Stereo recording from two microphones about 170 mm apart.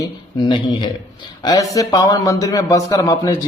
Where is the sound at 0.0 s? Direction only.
25° left (ahead or behind).